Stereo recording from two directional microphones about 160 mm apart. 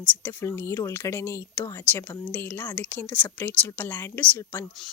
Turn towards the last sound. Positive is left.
turn(degrees=10)  # may be behind; listen again after turning